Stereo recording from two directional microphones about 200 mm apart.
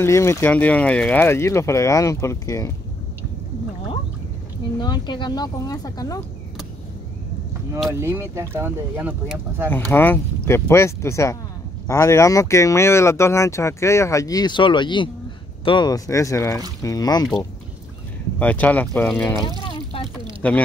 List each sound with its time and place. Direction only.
0.0 s speech: 15° left (ahead or behind)
4.7 s speech: 20° left (ahead or behind)
7.9 s speech: 15° right (ahead or behind)
9.7 s speech: 10° left (ahead or behind)
18.4 s speech: 10° left (ahead or behind)
19.6 s a sound: 25° left (ahead or behind)
20.4 s speech: 5° left (ahead or behind)